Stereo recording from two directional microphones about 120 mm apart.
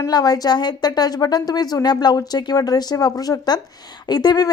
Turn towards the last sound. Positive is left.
turn(degrees=35)  # may be behind; listen again after turning